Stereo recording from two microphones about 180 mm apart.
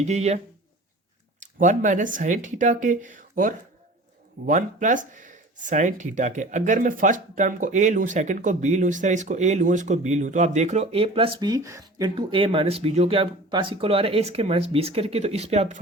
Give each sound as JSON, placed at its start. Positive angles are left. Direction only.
{"t": 0.0, "sound": "speech", "side_deg": -40}
{"t": 1.4, "sound": "speech", "side_deg": -45}